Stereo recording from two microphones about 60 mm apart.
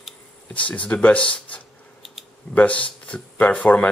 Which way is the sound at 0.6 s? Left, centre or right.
Left.